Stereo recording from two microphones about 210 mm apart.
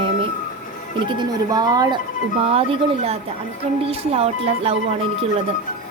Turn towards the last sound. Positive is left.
turn(degrees=-30)  # may be behind; listen again after turning